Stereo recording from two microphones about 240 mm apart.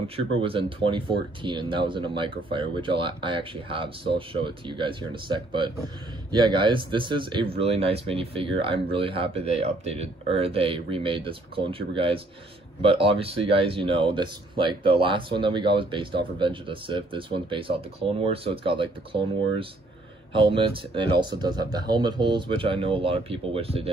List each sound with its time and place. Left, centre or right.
0.4 s speech: right
20.3 s speech: right